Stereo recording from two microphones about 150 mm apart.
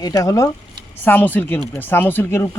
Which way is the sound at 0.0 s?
20° left (ahead or behind).